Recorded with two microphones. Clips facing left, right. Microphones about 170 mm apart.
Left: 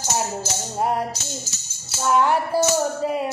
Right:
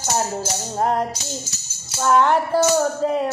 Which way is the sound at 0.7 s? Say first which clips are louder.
Right 2 dB; 10° left (ahead or behind).